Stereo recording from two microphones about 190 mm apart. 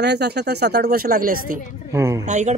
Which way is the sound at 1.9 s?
15° right (ahead or behind).